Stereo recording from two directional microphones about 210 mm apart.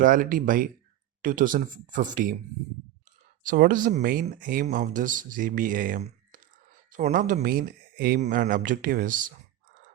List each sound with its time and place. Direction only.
0.0 s speech: 40° right (ahead or behind)
3.4 s speech: 40° right (ahead or behind)